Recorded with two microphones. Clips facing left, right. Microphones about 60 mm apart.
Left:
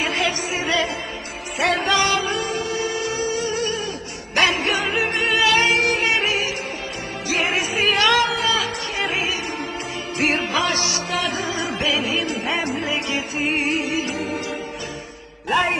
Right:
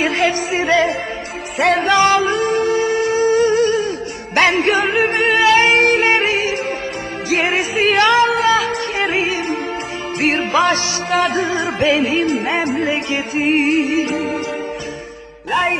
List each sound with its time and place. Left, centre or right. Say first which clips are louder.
0.0 s music: right 6 dB; right
5.4 s music: right 6 dB; right